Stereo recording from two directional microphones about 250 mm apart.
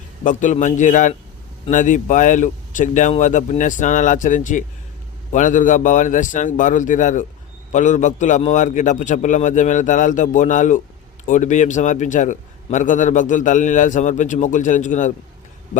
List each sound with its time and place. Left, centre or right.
0.3 s a man's voice: left